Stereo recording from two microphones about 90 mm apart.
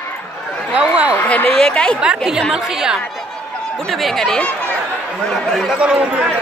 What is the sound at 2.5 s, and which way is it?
Speech, 5° right (ahead or behind).